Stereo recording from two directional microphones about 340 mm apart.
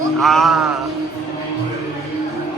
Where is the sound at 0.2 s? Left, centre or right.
Centre.